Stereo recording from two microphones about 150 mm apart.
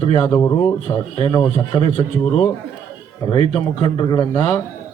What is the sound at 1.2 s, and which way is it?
Speech, 35° left (ahead or behind).